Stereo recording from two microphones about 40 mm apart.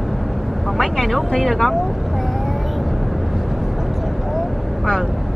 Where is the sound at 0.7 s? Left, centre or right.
Centre.